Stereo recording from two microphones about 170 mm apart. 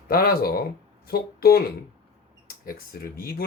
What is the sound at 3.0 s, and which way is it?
Speech, 60° left (ahead or behind).